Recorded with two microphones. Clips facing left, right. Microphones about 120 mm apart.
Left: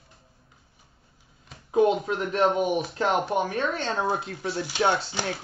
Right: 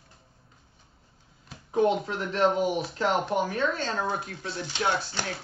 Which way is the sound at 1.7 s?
20° left (ahead or behind).